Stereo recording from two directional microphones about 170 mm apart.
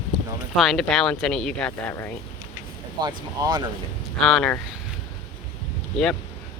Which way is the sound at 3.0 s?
25° right (ahead or behind).